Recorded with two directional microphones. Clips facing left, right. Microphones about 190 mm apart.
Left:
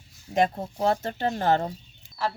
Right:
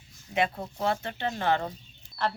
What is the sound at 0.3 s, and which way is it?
Speech, 45° left (ahead or behind).